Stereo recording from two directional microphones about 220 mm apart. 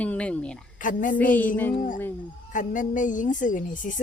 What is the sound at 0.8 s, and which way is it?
Speech, 35° left (ahead or behind).